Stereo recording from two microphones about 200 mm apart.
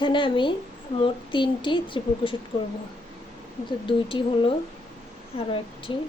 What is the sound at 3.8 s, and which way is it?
A woman's voice, 25° left (ahead or behind).